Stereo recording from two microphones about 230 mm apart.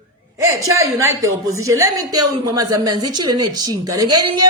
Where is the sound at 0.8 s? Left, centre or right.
Centre.